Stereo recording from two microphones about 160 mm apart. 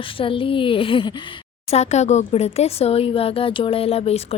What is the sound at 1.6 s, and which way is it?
A woman's voice, 45° left (ahead or behind).